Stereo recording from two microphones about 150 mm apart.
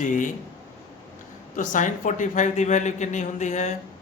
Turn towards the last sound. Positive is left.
turn(degrees=55)  # may be behind; listen again after turning